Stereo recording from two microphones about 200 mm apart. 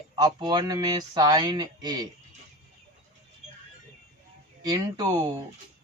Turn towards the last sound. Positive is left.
turn(degrees=-20)  # may be behind; listen again after turning